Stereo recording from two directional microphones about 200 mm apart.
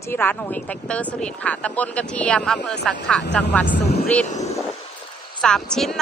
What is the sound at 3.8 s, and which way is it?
Vehicle, 55° left (ahead or behind).